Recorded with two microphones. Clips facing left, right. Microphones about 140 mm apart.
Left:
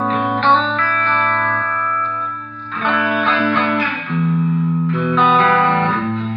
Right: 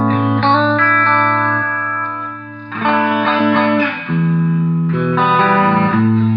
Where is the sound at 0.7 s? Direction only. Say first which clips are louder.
Right 5 dB; 70° right (ahead or behind).